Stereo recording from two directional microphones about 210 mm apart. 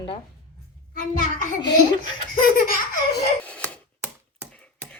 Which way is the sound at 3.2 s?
5° left (ahead or behind).